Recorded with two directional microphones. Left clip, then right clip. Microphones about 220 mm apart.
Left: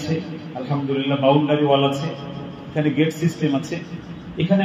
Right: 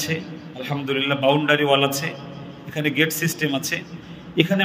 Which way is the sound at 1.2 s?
50° right (ahead or behind).